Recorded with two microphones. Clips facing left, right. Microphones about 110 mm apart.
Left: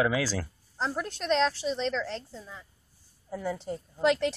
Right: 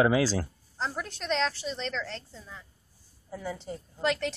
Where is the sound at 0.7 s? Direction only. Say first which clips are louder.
Left 2 dB; 5° left (ahead or behind).